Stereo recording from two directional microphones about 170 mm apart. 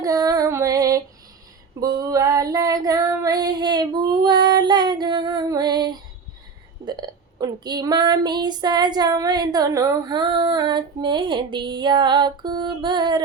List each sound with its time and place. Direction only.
0.0 s female singing: 20° right (ahead or behind)
6.8 s speech: 25° right (ahead or behind)